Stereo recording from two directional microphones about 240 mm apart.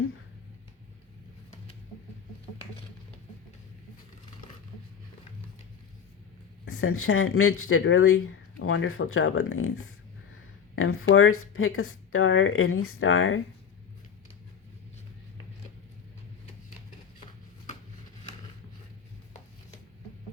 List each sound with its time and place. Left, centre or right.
6.7 s speech: left
10.8 s speech: left